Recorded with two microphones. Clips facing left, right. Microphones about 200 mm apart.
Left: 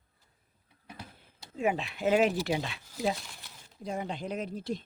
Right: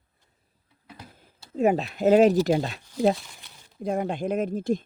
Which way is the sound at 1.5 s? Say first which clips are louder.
Right 8 dB; 40° right (ahead or behind).